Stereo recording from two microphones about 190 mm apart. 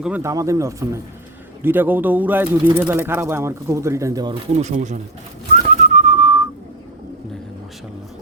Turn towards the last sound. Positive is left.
turn(degrees=-25)  # may be behind; listen again after turning